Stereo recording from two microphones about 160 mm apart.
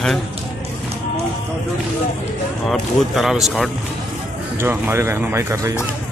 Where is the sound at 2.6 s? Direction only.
Centre (ahead or behind).